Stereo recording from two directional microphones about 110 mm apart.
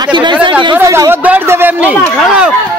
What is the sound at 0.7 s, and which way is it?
A man's voice, 25° right (ahead or behind).